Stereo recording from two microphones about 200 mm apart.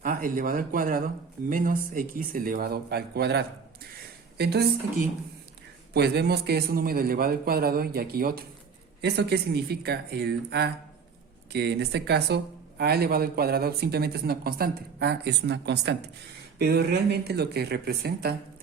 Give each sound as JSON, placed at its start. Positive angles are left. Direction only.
{"t": 0.0, "sound": "a woman's voice", "side_deg": -45}
{"t": 5.9, "sound": "speech", "side_deg": -55}